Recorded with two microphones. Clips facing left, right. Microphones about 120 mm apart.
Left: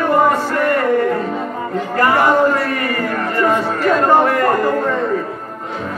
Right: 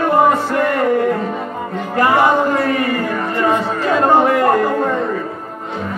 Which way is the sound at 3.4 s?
25° right (ahead or behind).